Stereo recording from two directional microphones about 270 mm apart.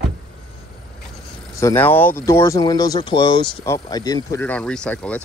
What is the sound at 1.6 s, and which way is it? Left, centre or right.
Speech, centre.